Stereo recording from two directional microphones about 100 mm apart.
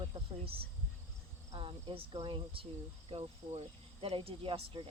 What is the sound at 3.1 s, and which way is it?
Cricket, 90° right.